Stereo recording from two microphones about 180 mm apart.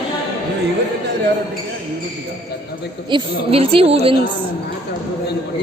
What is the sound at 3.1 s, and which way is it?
A woman's voice, 30° right (ahead or behind).